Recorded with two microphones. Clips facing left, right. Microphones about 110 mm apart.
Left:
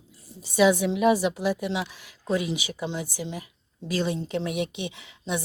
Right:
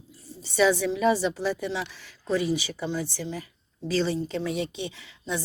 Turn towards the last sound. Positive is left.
turn(degrees=20)  # may be behind; listen again after turning